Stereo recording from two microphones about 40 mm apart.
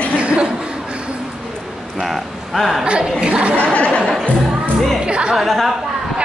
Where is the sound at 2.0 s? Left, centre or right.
Centre.